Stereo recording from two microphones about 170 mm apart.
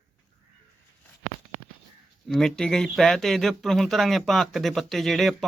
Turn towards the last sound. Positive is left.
turn(degrees=0)  # may be behind; listen again after turning